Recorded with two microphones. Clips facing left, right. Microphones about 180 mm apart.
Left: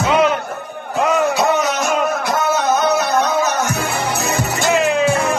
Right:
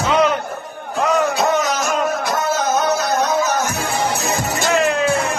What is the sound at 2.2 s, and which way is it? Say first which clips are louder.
Music: left 2 dB; 65° left (ahead or behind).